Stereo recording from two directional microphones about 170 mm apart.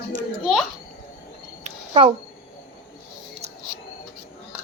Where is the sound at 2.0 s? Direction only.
35° right (ahead or behind).